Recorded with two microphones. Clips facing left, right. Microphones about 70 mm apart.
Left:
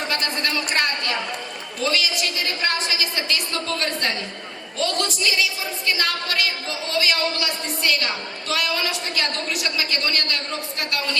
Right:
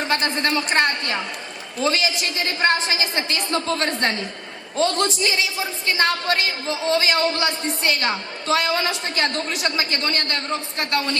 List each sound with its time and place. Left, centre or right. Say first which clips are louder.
0.1 s a woman's voice: right 4 dB; right